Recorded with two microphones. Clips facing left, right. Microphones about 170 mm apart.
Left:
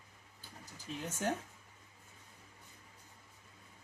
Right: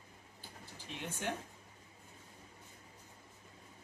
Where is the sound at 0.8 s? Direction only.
40° left (ahead or behind).